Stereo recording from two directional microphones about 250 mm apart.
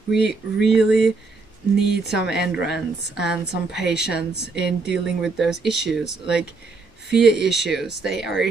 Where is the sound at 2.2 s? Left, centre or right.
Centre.